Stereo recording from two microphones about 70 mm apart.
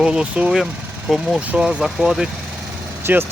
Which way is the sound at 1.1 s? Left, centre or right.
Centre.